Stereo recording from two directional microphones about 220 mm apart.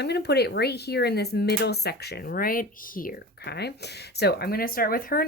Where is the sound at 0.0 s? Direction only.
50° left (ahead or behind).